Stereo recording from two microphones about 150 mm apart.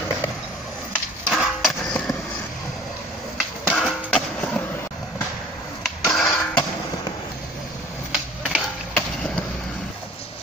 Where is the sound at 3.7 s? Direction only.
5° left (ahead or behind).